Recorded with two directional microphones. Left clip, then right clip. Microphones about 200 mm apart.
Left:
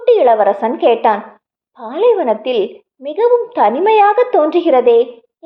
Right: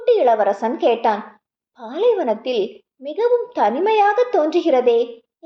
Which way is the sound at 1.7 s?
15° left (ahead or behind).